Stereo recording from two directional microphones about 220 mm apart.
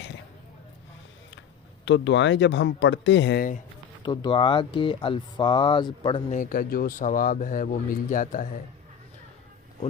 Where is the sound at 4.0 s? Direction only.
20° left (ahead or behind).